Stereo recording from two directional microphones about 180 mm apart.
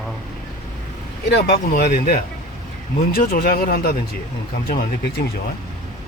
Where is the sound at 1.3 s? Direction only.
60° left (ahead or behind).